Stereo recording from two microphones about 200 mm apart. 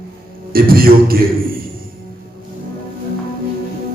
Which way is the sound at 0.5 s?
45° right (ahead or behind).